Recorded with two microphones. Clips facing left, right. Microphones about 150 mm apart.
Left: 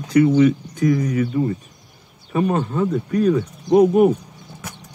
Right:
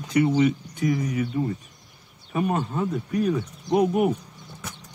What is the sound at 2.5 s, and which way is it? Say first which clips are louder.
Speech: left 5 dB; 70° left (ahead or behind).